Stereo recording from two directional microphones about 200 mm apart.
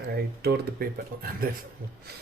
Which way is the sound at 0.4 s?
50° right (ahead or behind).